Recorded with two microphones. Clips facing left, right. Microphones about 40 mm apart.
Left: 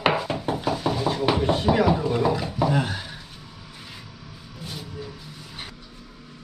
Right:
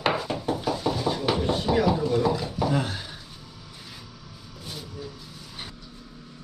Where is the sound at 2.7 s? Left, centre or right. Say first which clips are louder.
Left 2 dB; left.